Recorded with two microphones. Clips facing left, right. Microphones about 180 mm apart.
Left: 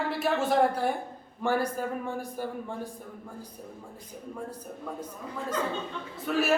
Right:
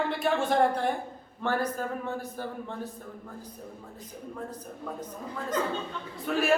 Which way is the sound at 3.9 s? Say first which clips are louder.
Even; 10° left (ahead or behind).